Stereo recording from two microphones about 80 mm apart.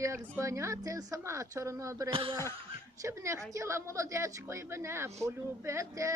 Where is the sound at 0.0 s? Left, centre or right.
Right.